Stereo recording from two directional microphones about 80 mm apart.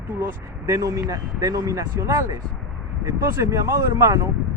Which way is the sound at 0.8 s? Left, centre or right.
Right.